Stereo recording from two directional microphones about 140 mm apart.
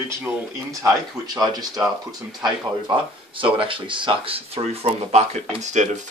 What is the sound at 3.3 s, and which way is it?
Speech, 40° right (ahead or behind).